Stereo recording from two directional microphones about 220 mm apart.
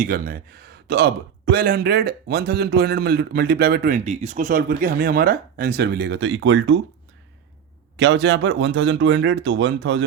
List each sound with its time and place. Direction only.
0.0 s a man's voice: 40° right (ahead or behind); by 6.7 s 60° right (ahead or behind)
7.9 s speech: 55° right (ahead or behind)